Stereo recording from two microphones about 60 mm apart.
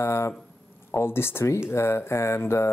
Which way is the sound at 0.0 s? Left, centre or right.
Left.